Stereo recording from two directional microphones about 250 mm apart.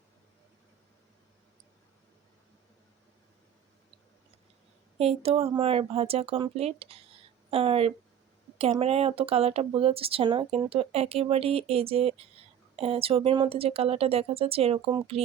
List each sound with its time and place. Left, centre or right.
4.9 s speech: right